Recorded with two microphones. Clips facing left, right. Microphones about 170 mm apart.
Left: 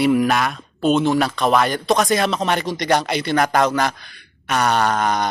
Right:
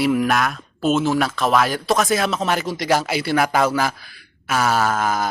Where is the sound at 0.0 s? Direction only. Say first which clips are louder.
Left 2 dB; centre (ahead or behind).